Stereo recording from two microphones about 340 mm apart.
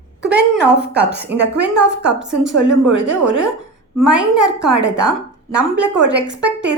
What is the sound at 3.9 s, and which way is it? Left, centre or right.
A woman's voice, centre.